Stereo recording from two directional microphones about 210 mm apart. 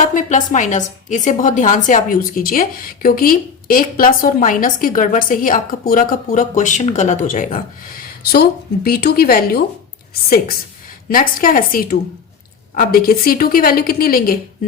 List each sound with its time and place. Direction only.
0.1 s a woman's voice: 35° left (ahead or behind)
11.1 s a woman's voice: 40° left (ahead or behind)